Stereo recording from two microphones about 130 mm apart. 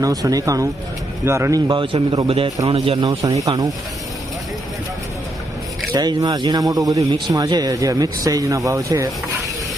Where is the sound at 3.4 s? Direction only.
30° right (ahead or behind).